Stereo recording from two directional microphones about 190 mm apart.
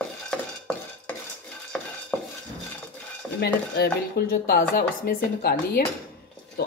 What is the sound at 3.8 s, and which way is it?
Speech, 55° left (ahead or behind).